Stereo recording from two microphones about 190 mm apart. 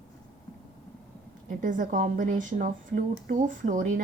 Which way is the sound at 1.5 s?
45° right (ahead or behind).